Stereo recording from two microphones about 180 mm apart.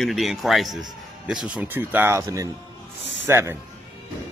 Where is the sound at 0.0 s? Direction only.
Centre (ahead or behind).